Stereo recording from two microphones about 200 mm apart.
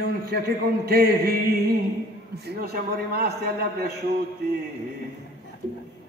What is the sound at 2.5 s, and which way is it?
A man's voice, 50° right (ahead or behind).